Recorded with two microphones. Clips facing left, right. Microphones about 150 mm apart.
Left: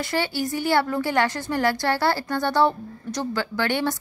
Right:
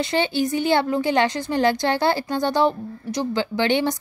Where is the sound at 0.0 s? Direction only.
20° right (ahead or behind).